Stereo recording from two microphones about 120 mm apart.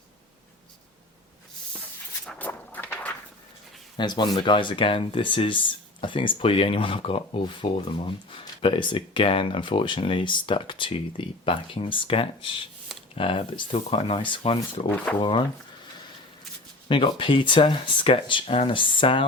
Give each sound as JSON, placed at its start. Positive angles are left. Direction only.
{"t": 2.4, "sound": "a sound", "side_deg": 15}
{"t": 3.9, "sound": "speech", "side_deg": 40}
{"t": 14.8, "sound": "speech", "side_deg": 15}
{"t": 15.2, "sound": "speech", "side_deg": 45}
{"t": 16.9, "sound": "speech", "side_deg": 45}